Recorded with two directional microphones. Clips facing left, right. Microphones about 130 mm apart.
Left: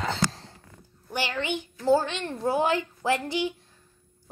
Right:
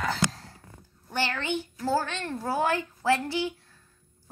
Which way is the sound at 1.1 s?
15° left (ahead or behind).